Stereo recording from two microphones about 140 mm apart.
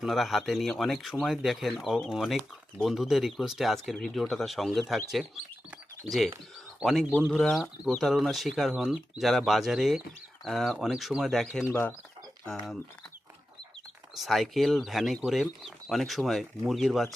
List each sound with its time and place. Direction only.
0.0 s speech: centre (ahead or behind)
6.1 s speech: centre (ahead or behind)
11.6 s speech: 15° left (ahead or behind)
14.2 s speech: centre (ahead or behind)